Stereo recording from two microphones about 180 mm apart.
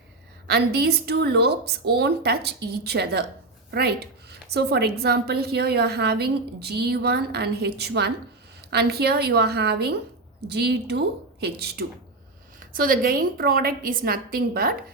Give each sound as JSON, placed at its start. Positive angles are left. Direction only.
{"t": 0.4, "sound": "a woman's voice", "side_deg": -60}
{"t": 12.5, "sound": "a woman's voice", "side_deg": -50}